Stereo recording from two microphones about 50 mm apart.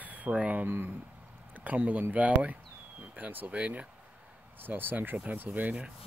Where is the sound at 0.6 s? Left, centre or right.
Right.